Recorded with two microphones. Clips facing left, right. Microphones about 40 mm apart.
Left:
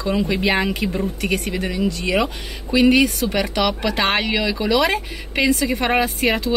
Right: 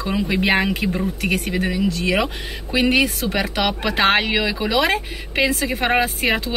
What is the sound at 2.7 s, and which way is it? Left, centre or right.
Speech, centre.